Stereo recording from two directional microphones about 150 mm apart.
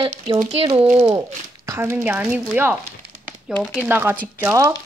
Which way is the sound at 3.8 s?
15° right (ahead or behind).